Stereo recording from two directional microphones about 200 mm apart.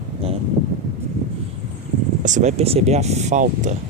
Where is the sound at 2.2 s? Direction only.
35° right (ahead or behind).